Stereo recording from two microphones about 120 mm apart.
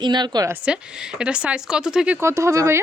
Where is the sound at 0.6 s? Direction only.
10° right (ahead or behind).